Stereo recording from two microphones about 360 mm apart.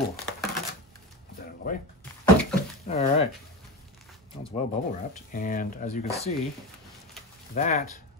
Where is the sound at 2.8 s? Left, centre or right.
Centre.